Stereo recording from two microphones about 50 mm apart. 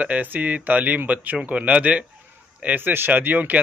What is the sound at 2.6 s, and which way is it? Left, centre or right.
Speech, right.